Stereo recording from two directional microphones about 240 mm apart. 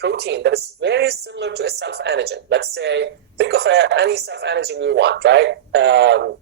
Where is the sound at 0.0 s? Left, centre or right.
Right.